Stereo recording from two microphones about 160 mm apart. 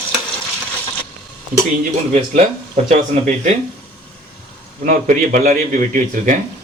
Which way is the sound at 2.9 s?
45° right (ahead or behind).